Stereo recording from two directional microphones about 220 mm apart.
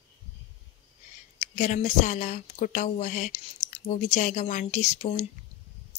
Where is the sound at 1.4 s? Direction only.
35° left (ahead or behind).